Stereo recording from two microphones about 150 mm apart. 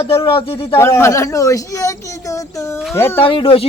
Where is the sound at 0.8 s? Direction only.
15° left (ahead or behind).